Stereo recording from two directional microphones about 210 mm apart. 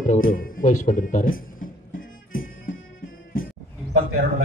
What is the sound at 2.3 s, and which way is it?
Music, 40° left (ahead or behind).